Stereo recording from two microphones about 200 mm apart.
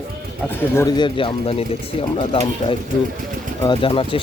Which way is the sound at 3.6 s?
25° left (ahead or behind).